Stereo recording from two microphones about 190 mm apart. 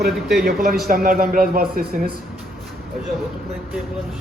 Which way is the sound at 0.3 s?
55° right (ahead or behind).